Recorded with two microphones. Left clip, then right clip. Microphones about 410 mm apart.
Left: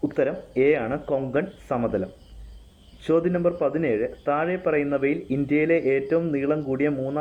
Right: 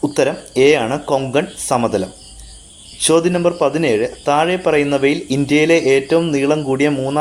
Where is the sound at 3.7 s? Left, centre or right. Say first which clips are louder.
Right 8 dB; left.